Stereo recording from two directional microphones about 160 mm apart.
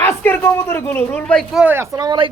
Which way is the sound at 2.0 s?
30° right (ahead or behind).